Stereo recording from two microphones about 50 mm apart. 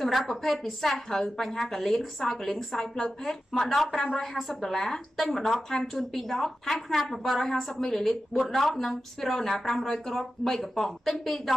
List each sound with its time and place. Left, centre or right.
0.0 s a woman's voice: centre